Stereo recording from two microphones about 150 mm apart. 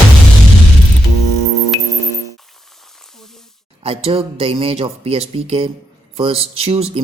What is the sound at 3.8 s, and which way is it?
Speech, 40° right (ahead or behind).